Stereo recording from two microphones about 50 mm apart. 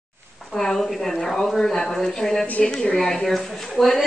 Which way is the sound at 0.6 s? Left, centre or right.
Centre.